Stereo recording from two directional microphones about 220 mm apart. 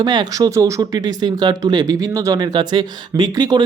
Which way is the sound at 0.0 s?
20° right (ahead or behind).